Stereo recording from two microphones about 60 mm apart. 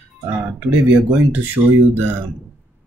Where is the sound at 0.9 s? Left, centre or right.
Right.